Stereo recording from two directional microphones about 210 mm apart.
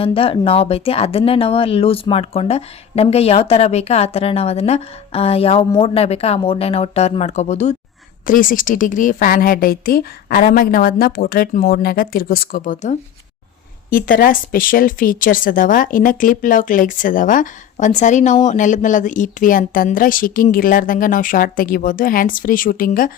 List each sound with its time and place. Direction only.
0.0 s a woman's voice: 25° left (ahead or behind); by 23.1 s 40° left (ahead or behind)